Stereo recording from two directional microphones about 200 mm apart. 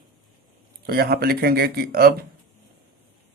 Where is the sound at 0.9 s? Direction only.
50° right (ahead or behind).